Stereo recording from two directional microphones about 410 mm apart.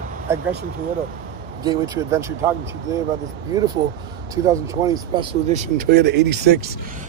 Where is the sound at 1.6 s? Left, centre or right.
Centre.